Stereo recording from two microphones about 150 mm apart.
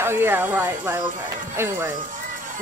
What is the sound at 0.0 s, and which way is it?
A woman's voice, 15° right (ahead or behind).